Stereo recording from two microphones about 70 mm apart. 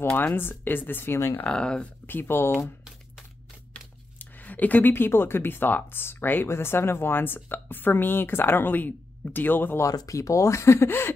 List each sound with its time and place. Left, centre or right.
0.1 s speech: left
1.4 s speech: centre
2.0 s speech: left
4.2 s speech: left
9.9 s speech: left